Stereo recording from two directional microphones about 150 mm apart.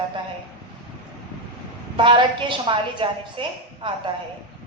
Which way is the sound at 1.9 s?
35° right (ahead or behind).